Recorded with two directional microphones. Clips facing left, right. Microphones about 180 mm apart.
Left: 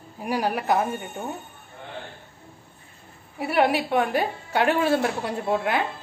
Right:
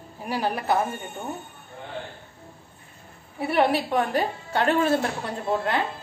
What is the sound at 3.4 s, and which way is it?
A woman's voice, 10° left (ahead or behind).